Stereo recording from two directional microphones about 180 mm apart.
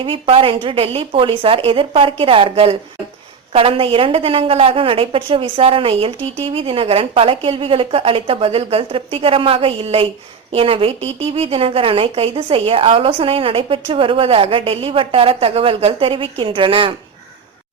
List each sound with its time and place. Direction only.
0.0 s a woman's voice: 30° right (ahead or behind)